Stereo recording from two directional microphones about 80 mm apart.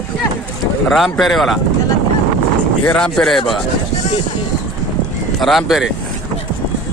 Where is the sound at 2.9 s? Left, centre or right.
Centre.